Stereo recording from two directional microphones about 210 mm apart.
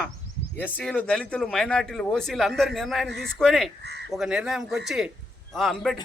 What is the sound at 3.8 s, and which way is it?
Crow, 55° right (ahead or behind).